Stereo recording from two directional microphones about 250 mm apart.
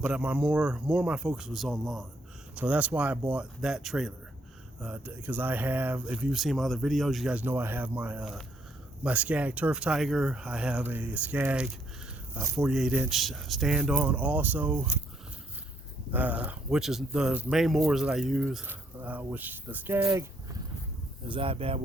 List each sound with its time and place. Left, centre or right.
0.0 s speech: centre
16.1 s speech: centre
21.2 s speech: right